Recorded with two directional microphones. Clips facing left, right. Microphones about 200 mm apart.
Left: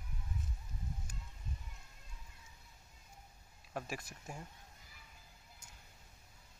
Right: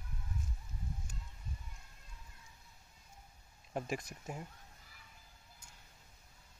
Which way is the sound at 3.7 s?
20° right (ahead or behind).